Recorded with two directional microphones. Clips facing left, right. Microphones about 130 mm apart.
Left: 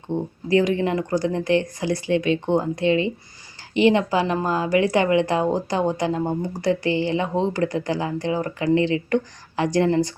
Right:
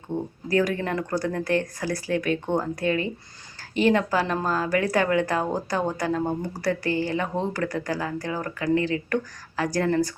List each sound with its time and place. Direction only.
0.1 s a woman's voice: 20° left (ahead or behind)